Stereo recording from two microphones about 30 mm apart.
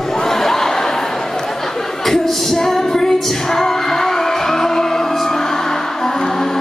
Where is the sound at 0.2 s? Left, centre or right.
Centre.